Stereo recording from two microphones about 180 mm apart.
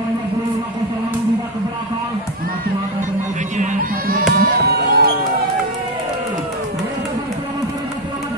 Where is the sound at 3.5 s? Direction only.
45° right (ahead or behind).